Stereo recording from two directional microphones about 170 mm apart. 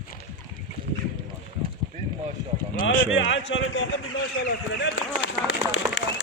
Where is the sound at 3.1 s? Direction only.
90° left.